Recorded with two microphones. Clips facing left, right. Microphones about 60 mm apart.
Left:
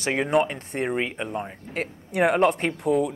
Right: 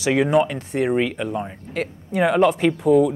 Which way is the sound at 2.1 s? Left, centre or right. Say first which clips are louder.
Right 2 dB; left.